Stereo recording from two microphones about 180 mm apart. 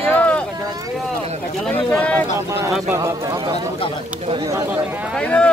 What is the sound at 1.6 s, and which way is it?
Speech, 5° left (ahead or behind).